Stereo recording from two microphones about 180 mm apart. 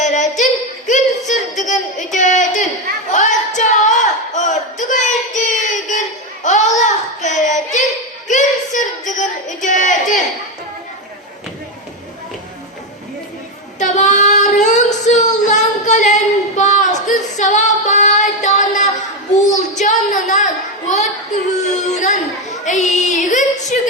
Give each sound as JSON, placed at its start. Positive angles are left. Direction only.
{"t": 0.0, "sound": "female singing", "side_deg": 40}
{"t": 2.1, "sound": "a sound", "side_deg": 45}
{"t": 13.7, "sound": "child singing", "side_deg": 40}
{"t": 17.1, "sound": "female singing", "side_deg": 45}
{"t": 19.4, "sound": "child singing", "side_deg": 40}
{"t": 21.8, "sound": "a sound", "side_deg": 40}